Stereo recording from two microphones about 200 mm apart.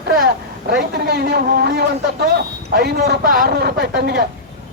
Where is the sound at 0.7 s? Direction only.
55° right (ahead or behind).